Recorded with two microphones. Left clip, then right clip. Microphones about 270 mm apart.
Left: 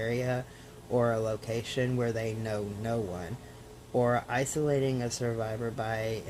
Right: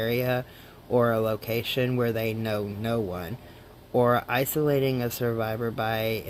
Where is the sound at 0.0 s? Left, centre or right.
Right.